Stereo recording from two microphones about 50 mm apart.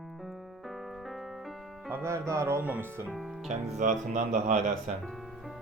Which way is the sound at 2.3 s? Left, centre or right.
Right.